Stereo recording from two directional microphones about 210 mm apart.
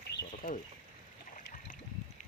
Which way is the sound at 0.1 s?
40° left (ahead or behind).